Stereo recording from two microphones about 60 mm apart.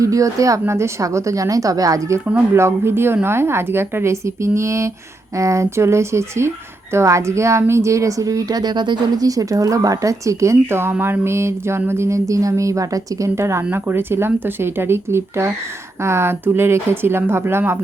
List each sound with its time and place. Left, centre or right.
0.0 s speech: right
0.7 s speech: right
2.6 s speech: right
13.3 s speech: right